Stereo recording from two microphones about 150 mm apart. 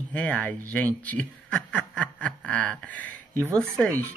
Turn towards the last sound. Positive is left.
turn(degrees=5)  # may be behind; listen again after turning